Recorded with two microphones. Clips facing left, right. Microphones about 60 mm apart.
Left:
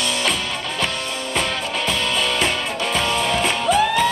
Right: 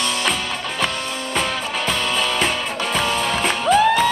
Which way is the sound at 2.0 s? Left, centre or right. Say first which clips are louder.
Right 1 dB; centre.